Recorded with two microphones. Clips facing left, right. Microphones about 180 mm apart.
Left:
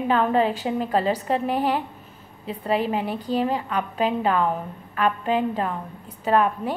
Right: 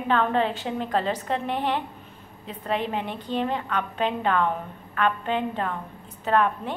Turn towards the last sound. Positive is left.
turn(degrees=10)  # may be behind; listen again after turning